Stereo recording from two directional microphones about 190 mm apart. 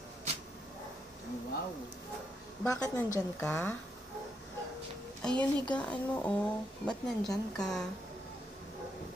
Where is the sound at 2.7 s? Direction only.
20° left (ahead or behind).